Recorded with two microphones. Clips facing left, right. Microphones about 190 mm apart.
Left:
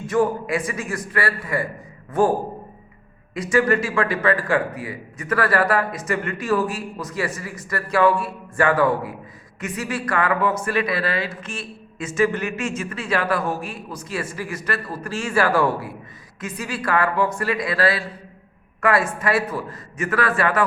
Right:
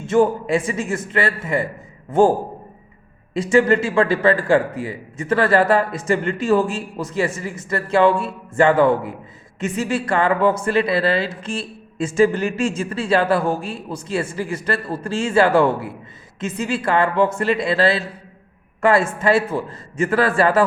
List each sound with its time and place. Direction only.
0.0 s speech: 25° right (ahead or behind)
3.3 s speech: 25° right (ahead or behind)